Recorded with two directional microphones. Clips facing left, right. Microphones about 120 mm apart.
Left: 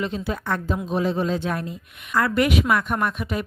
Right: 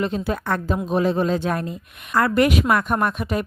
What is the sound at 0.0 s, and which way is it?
Speech, 50° right (ahead or behind).